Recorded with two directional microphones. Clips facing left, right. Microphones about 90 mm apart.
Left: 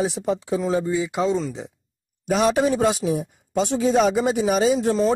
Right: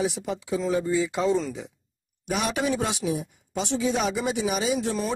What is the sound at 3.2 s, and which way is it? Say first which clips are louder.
A man's voice: left 7 dB; 50° left (ahead or behind).